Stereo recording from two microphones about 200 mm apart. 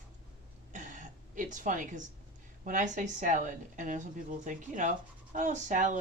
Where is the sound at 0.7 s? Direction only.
40° right (ahead or behind).